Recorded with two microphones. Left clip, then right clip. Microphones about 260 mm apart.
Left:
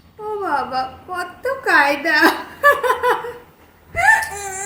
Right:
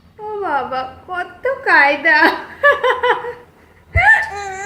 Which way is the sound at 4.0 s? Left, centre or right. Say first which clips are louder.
Right 3 dB; centre.